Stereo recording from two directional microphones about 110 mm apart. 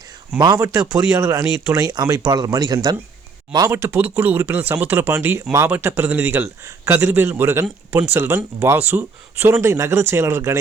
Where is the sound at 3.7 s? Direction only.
25° right (ahead or behind).